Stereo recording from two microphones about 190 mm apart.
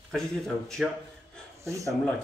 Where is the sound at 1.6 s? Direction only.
15° right (ahead or behind).